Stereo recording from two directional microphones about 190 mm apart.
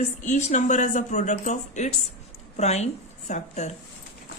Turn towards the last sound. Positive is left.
turn(degrees=35)  # may be behind; listen again after turning